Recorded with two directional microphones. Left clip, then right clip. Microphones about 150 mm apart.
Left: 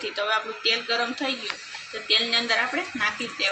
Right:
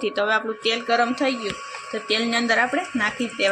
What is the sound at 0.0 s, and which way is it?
A woman's voice, 75° right (ahead or behind).